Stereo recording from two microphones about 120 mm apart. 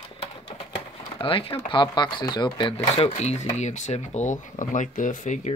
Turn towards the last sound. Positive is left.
turn(degrees=85)